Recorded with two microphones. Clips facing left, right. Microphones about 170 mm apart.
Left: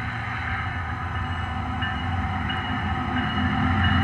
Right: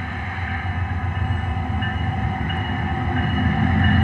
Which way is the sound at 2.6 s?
40° right (ahead or behind).